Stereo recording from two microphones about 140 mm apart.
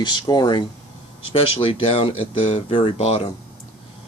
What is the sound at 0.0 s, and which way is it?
Speech, 30° left (ahead or behind).